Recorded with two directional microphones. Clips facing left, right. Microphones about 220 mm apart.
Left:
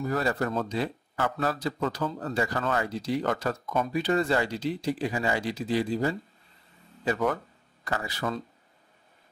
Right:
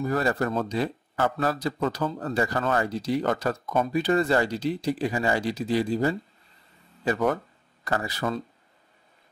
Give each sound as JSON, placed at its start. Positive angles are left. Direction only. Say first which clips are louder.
{"t": 0.0, "sound": "speech", "louder": "right 2 dB", "side_deg": -50}